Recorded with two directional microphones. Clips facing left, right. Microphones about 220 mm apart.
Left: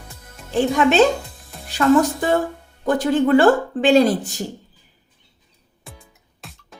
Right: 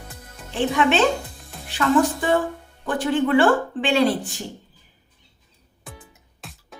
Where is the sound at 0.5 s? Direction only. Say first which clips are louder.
Left 4 dB; 40° left (ahead or behind).